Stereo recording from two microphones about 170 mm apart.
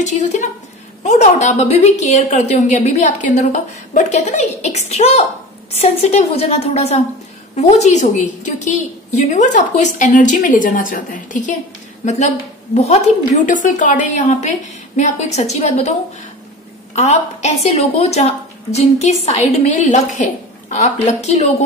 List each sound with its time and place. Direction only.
0.0 s a woman's voice: 45° left (ahead or behind)
16.9 s a woman's voice: 40° left (ahead or behind)